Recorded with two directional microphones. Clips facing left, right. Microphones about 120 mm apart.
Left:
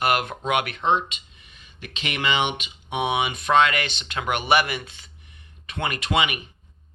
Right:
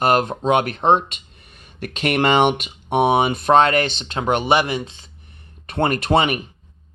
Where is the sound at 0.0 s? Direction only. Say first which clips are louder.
Right 6 dB; 35° right (ahead or behind).